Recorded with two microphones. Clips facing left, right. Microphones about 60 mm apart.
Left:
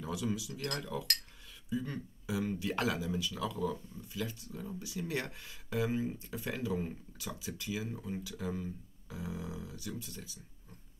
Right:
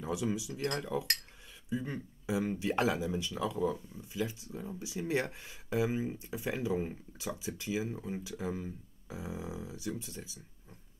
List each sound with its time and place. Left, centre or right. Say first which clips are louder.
0.0 s speech: right 2 dB; right